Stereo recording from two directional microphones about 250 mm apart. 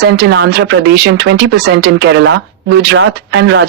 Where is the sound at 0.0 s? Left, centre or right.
Right.